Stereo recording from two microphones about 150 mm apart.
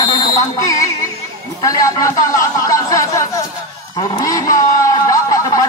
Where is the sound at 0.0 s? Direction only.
30° left (ahead or behind).